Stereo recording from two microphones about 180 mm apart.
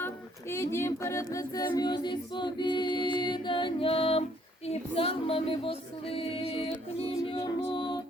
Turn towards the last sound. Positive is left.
turn(degrees=25)  # may be behind; listen again after turning